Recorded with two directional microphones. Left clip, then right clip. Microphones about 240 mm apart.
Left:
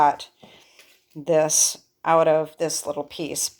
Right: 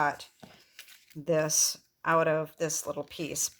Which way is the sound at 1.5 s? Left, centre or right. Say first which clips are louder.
Left 7 dB; right.